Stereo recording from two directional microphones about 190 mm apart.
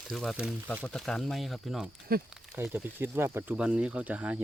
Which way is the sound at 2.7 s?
10° right (ahead or behind).